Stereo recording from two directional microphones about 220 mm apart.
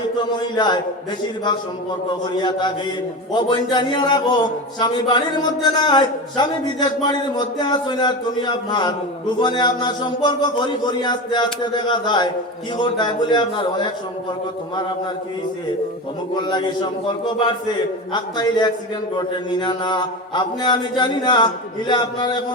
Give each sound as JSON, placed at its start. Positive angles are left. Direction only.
{"t": 0.3, "sound": "speech", "side_deg": 20}
{"t": 2.4, "sound": "speech", "side_deg": 20}
{"t": 16.3, "sound": "speech", "side_deg": 20}
{"t": 18.1, "sound": "speech", "side_deg": 20}